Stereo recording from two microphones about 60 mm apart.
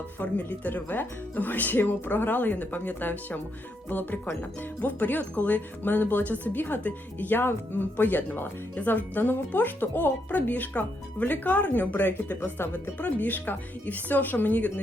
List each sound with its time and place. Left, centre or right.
0.2 s speech: left